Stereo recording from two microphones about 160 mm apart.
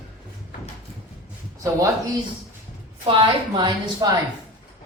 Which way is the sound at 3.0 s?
30° right (ahead or behind).